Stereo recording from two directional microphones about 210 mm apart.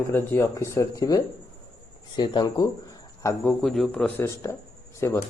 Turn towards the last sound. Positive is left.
turn(degrees=15)  # may be behind; listen again after turning